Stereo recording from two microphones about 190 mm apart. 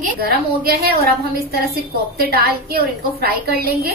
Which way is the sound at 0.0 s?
55° right (ahead or behind).